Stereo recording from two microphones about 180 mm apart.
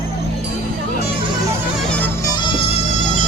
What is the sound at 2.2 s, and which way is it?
Music, 25° left (ahead or behind).